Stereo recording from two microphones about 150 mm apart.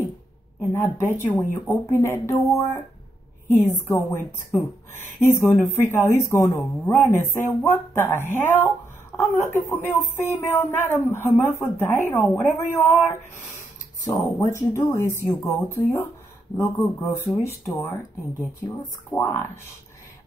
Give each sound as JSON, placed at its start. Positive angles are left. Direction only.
{"t": 0.7, "sound": "a woman's voice", "side_deg": 15}
{"t": 19.1, "sound": "a woman's voice", "side_deg": 10}